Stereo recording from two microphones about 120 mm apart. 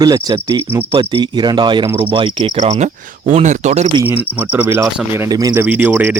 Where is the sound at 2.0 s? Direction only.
45° right (ahead or behind).